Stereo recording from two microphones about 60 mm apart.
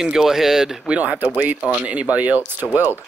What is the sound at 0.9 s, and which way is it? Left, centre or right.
Speech, right.